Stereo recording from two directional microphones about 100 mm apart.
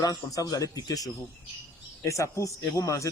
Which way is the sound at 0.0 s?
35° left (ahead or behind).